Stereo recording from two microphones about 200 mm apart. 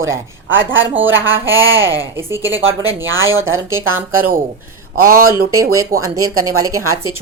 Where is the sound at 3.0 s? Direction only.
75° right (ahead or behind).